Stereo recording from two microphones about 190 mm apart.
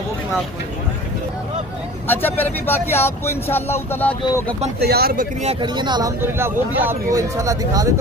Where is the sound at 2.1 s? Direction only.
10° left (ahead or behind).